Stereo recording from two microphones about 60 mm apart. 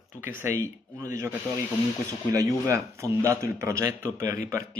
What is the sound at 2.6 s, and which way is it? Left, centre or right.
Speech, right.